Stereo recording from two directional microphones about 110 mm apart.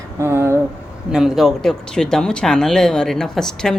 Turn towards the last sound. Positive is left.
turn(degrees=5)  # may be behind; listen again after turning